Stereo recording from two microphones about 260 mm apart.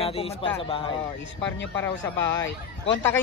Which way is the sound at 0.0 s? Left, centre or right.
Left.